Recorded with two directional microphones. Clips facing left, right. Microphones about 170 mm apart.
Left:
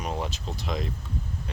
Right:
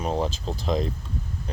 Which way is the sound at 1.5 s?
35° right (ahead or behind).